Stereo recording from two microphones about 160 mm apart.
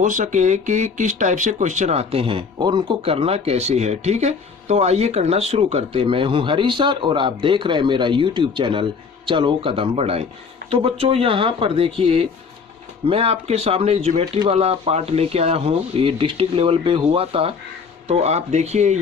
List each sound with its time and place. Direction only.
0.0 s speech: 50° right (ahead or behind)